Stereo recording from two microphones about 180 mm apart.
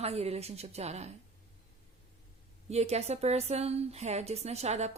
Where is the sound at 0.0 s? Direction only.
35° right (ahead or behind).